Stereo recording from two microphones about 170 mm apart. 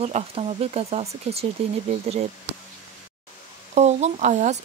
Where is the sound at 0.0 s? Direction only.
35° right (ahead or behind).